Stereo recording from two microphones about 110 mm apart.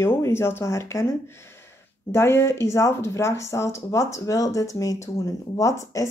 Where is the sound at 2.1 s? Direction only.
25° left (ahead or behind).